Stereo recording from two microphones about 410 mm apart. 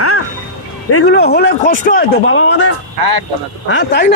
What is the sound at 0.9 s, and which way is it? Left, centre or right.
Speech, left.